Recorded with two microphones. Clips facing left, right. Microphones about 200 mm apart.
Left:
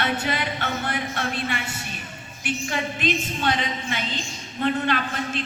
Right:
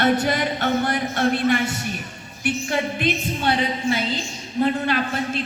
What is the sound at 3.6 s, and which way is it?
A man's voice, 40° right (ahead or behind).